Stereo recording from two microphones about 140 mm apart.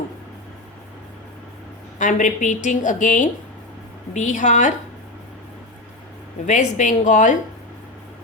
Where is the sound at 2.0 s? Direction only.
65° left (ahead or behind).